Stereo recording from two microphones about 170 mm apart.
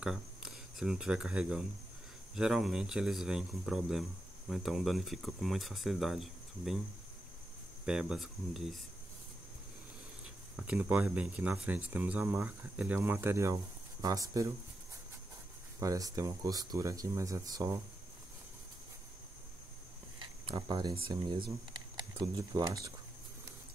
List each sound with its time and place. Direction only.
0.0 s speech: 5° right (ahead or behind)
7.8 s speech: 5° right (ahead or behind)
10.5 s speech: 5° right (ahead or behind)
15.8 s speech: 20° right (ahead or behind)
20.2 s a sound: 25° right (ahead or behind)
21.0 s speech: 30° right (ahead or behind)